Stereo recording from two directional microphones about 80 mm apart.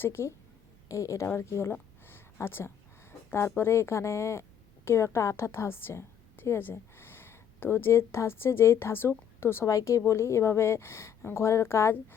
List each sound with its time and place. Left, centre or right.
0.0 s a woman's voice: left
0.9 s a woman's voice: left
9.6 s a woman's voice: left